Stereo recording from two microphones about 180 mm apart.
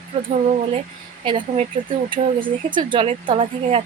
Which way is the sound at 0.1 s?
30° right (ahead or behind).